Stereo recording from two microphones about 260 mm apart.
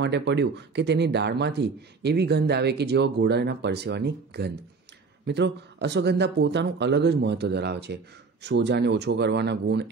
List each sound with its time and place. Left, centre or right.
0.0 s speech: right